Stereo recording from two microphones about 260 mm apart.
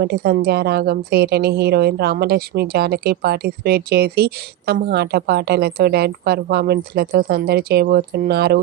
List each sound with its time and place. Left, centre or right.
0.0 s a woman's voice: right